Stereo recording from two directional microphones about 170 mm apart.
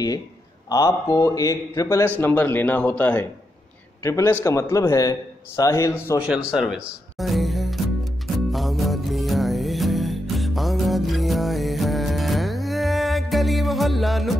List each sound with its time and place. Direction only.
0.7 s a man's voice: 20° left (ahead or behind)
6.2 s music: 5° right (ahead or behind)